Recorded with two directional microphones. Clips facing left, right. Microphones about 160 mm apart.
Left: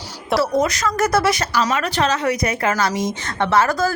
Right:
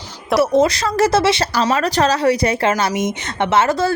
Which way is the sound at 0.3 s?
25° right (ahead or behind).